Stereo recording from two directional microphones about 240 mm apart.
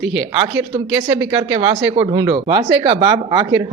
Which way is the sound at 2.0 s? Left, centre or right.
Centre.